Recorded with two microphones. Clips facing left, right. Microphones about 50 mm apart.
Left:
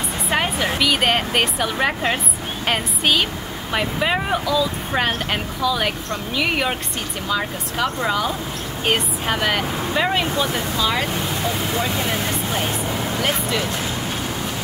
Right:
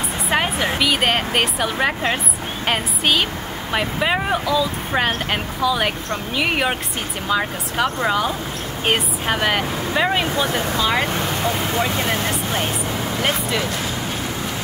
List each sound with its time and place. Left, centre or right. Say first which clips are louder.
0.3 s speech: right 1 dB; centre
11.1 s speech: right 2 dB; right